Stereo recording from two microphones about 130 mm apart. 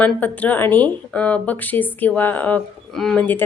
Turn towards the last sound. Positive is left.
turn(degrees=5)  # may be behind; listen again after turning